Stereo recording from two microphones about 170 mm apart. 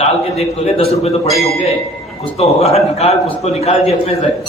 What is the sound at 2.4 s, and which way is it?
Speech, 35° left (ahead or behind).